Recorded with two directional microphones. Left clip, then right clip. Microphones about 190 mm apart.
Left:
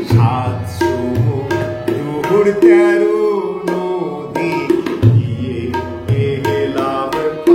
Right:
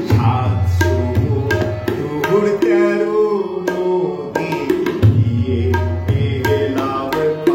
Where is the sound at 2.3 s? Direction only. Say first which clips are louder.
Left 5 dB; 20° left (ahead or behind).